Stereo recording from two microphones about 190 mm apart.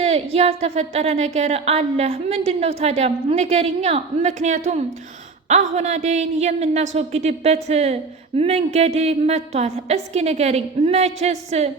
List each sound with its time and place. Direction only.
0.0 s a woman's voice: 30° right (ahead or behind)